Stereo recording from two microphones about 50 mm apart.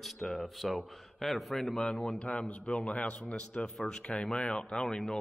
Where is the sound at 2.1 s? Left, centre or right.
Left.